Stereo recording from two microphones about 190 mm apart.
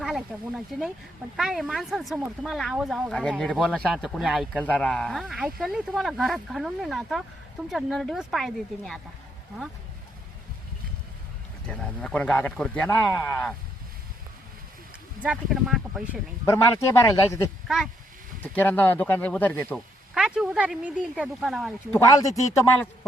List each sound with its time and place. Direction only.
0.0 s speech: centre (ahead or behind)
11.7 s speech: 5° left (ahead or behind)
15.2 s speech: 5° right (ahead or behind)
16.5 s speech: 15° left (ahead or behind)
18.5 s speech: 10° left (ahead or behind)
20.1 s speech: 5° right (ahead or behind)
21.9 s speech: 15° left (ahead or behind)